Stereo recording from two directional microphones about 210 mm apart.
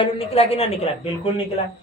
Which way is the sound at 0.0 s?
30° left (ahead or behind).